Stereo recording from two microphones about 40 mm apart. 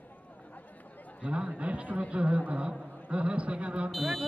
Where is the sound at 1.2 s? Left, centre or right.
Right.